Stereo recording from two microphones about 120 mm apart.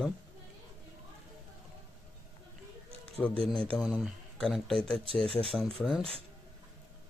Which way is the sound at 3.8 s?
5° right (ahead or behind).